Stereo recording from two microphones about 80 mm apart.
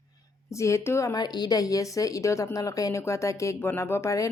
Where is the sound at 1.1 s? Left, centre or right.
Left.